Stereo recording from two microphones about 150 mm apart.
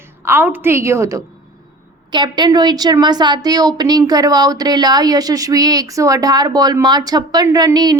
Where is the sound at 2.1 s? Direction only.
30° right (ahead or behind).